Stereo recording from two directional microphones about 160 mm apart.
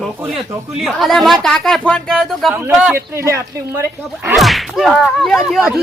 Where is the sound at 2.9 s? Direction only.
15° right (ahead or behind).